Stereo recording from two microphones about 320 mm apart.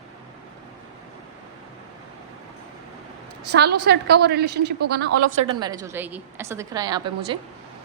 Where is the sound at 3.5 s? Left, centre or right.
Right.